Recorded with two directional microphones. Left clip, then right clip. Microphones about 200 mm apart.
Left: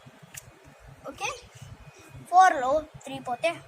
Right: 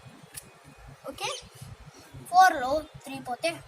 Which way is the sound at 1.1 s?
10° left (ahead or behind).